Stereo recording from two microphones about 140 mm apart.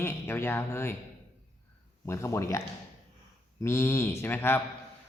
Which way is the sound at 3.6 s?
20° left (ahead or behind).